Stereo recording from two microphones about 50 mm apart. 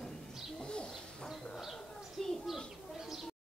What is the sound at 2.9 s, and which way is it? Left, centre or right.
Bird, centre.